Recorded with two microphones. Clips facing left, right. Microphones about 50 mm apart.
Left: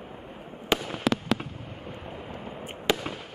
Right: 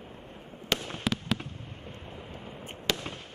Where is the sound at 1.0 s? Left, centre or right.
Left.